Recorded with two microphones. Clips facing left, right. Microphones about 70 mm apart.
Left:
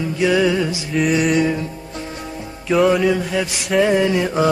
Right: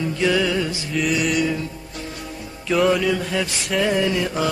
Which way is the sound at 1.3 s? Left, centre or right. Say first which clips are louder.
Left 4 dB; left.